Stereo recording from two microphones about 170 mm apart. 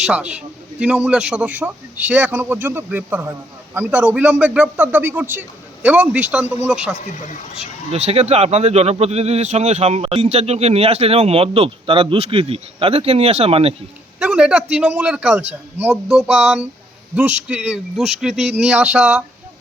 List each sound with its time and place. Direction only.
0.0 s a man's voice: 5° right (ahead or behind)
7.0 s speech: 45° left (ahead or behind)
7.5 s speech: 40° right (ahead or behind)
14.2 s a man's voice: 5° right (ahead or behind)